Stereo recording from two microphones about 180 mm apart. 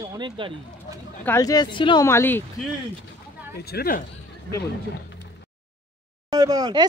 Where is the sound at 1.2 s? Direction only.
15° left (ahead or behind).